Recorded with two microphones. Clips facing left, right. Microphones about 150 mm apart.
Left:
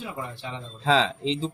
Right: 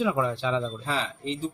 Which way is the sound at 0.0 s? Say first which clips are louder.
Right 10 dB; 90° right.